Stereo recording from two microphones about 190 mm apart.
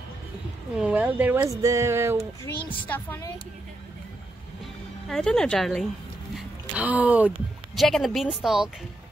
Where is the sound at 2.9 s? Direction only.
10° left (ahead or behind).